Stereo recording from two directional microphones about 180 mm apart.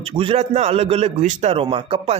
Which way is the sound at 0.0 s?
30° right (ahead or behind).